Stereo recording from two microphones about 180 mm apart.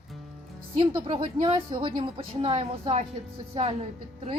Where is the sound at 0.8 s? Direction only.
25° right (ahead or behind).